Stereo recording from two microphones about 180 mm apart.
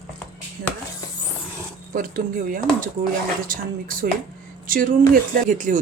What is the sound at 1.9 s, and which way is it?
Speech, 50° right (ahead or behind).